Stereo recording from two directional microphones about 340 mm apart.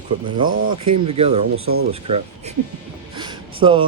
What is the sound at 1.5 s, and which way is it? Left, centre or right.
Speech, right.